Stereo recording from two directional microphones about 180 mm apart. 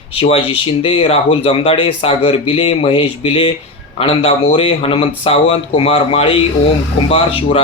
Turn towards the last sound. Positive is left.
turn(degrees=30)  # may be behind; listen again after turning